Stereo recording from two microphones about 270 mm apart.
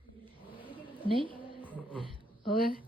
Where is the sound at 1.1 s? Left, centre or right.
Centre.